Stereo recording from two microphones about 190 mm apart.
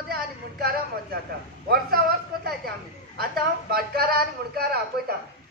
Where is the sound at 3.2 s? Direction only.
55° right (ahead or behind).